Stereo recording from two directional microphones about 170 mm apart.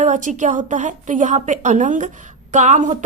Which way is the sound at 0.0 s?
50° right (ahead or behind).